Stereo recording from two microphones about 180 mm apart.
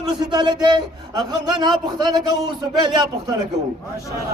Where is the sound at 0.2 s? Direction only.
25° right (ahead or behind).